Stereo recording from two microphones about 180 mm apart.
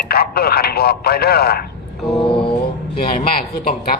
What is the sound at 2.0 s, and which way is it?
Mantra, centre (ahead or behind).